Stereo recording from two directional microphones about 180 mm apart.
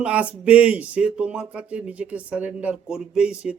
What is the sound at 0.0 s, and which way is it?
A man's voice, 5° right (ahead or behind).